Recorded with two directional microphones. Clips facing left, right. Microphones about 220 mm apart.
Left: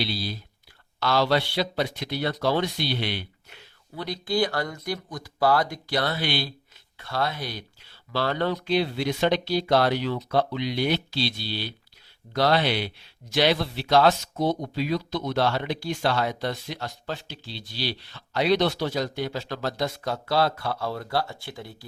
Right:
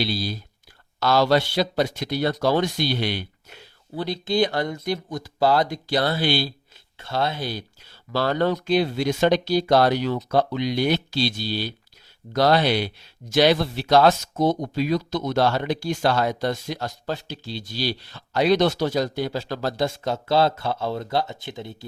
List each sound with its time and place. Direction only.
0.0 s speech: 40° right (ahead or behind)
4.0 s speech: 25° right (ahead or behind)
7.9 s speech: 45° right (ahead or behind); by 21.8 s 20° right (ahead or behind)